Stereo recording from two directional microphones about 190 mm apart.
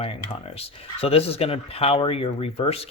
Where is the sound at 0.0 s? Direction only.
30° left (ahead or behind).